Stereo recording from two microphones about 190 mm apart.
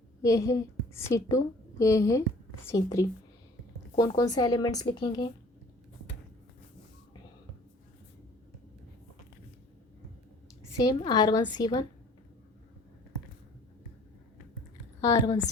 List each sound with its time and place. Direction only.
0.2 s a woman's voice: 15° left (ahead or behind)
4.2 s speech: 20° left (ahead or behind)
10.8 s speech: 20° left (ahead or behind)
15.0 s a woman's voice: 15° left (ahead or behind)